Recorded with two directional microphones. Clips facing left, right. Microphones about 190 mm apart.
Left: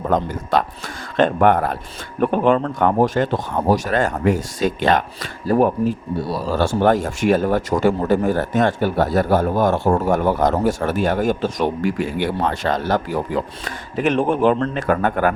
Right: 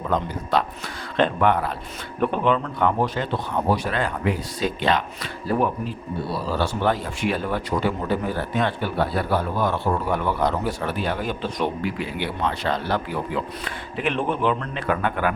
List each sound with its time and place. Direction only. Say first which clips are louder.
0.1 s speech: left 3 dB; 45° left (ahead or behind)